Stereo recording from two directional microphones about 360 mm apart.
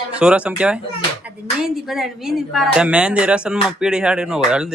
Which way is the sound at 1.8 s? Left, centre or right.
Centre.